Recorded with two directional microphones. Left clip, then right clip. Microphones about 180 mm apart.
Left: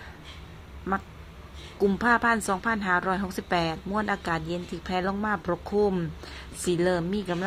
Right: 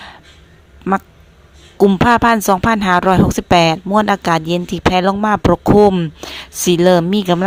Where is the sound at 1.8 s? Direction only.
40° right (ahead or behind).